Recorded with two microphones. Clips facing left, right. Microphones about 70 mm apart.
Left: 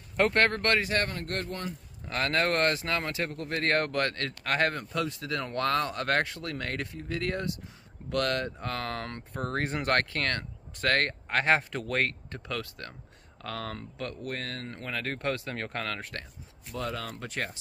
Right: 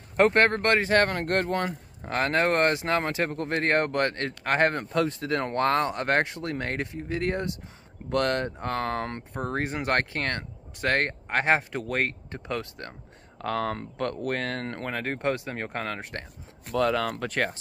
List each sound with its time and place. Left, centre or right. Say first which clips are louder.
0.2 s speech: right 4 dB; right
1.0 s speech: right 8 dB; right
2.1 s speech: right 4 dB; right
3.6 s speech: right 2 dB; right
9.4 s speech: right 2 dB; centre
9.9 s speech: right 1 dB; right
12.4 s speech: right 4 dB; right
13.4 s speech: right 8 dB; right
14.9 s speech: right 3 dB; right
16.6 s speech: right 10 dB; right